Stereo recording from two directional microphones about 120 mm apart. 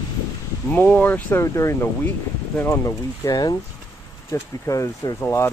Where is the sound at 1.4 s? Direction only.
25° left (ahead or behind).